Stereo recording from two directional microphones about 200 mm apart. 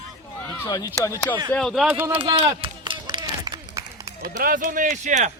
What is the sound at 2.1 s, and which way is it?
Run, 30° right (ahead or behind).